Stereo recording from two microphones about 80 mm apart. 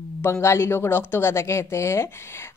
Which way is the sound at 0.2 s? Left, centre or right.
Left.